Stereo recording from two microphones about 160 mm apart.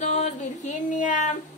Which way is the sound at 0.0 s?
50° left (ahead or behind).